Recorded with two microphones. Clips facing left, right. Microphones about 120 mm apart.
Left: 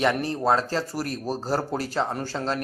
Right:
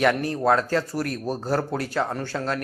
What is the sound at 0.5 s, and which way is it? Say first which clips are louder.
Speech: right 2 dB; 30° left (ahead or behind).